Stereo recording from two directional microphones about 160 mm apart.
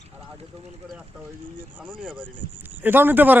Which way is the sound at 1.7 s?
10° right (ahead or behind).